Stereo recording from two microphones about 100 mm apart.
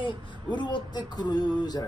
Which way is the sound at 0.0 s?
55° left (ahead or behind).